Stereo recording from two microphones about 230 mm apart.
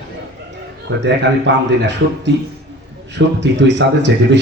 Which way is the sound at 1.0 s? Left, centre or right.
Right.